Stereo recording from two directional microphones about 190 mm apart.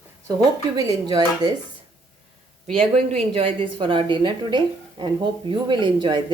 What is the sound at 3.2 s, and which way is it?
Speech, 30° right (ahead or behind).